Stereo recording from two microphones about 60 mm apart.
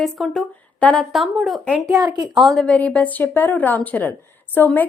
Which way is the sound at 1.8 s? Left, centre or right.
Right.